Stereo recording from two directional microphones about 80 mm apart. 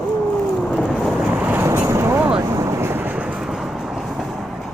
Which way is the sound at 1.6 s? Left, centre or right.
Right.